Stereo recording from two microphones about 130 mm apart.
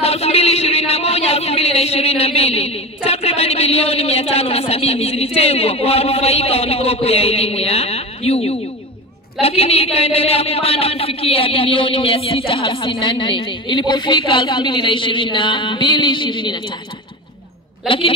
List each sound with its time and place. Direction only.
0.0 s a sound: 50° left (ahead or behind)
3.1 s a woman's voice: 50° left (ahead or behind)
17.8 s speech: 45° left (ahead or behind)